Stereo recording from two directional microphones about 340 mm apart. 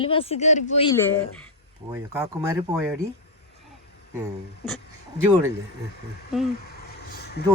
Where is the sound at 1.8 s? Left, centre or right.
Centre.